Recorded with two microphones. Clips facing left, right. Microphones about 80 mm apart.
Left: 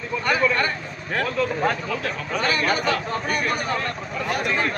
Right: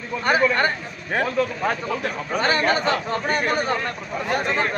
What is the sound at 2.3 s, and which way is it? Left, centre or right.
Speech, right.